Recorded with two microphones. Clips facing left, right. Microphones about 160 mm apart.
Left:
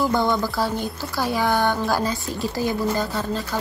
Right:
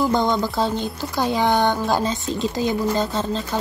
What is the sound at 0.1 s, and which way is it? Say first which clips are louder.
Speech: right 1 dB; 20° right (ahead or behind).